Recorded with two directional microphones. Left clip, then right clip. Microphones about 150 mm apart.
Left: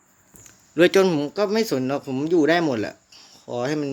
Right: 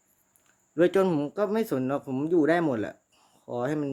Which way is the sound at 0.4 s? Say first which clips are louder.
Left 6 dB; centre (ahead or behind).